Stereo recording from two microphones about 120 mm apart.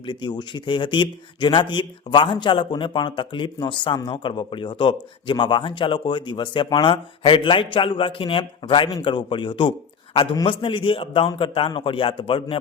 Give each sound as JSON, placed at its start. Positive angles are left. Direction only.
{"t": 0.0, "sound": "speech", "side_deg": 40}